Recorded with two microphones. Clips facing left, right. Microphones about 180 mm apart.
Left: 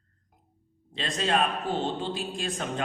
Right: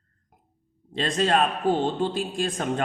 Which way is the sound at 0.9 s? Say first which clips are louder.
Right 5 dB; 50° right (ahead or behind).